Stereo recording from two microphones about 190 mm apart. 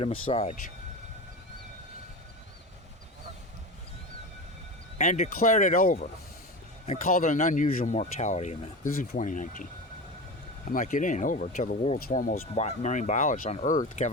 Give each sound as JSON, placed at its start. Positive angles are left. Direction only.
{"t": 0.0, "sound": "speech", "side_deg": 30}
{"t": 4.9, "sound": "speech", "side_deg": 35}
{"t": 10.7, "sound": "speech", "side_deg": 45}